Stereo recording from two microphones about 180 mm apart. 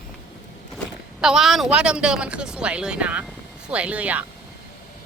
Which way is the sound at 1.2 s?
Centre (ahead or behind).